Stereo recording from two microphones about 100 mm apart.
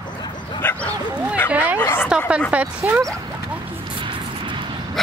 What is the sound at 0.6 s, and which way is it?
Bow-wow, 20° left (ahead or behind).